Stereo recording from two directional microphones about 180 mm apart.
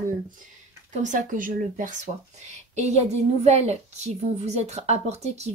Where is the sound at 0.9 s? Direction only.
45° right (ahead or behind).